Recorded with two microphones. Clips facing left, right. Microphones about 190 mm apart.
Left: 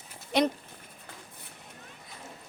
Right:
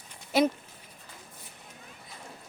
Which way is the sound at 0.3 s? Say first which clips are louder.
Right 1 dB; 5° right (ahead or behind).